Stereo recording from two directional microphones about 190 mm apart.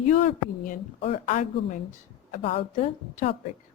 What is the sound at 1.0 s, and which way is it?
A woman's voice, 35° left (ahead or behind).